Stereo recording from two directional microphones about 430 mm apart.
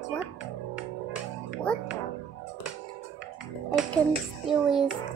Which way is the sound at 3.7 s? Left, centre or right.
Centre.